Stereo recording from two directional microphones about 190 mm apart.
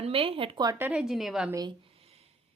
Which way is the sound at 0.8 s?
5° right (ahead or behind).